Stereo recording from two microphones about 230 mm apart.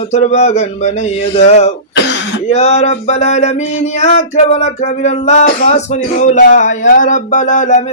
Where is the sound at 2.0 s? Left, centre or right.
Left.